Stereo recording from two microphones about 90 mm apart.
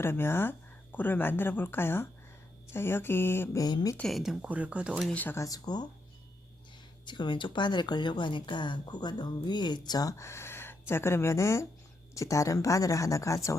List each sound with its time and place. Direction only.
0.0 s speech: 25° left (ahead or behind)
3.6 s speech: 45° left (ahead or behind)
4.1 s speech: 5° right (ahead or behind)
4.4 s speech: 15° right (ahead or behind)
5.1 s speech: 20° left (ahead or behind)
5.4 s speech: 45° left (ahead or behind)
7.0 s speech: 60° left (ahead or behind); by 13.6 s 35° left (ahead or behind)